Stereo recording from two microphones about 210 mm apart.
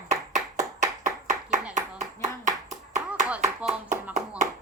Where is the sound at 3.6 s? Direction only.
5° right (ahead or behind).